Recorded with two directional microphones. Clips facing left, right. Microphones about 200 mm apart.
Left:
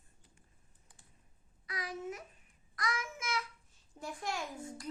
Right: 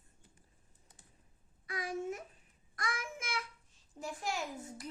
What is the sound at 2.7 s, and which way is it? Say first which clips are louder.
Child singing: left 2 dB; 55° right (ahead or behind).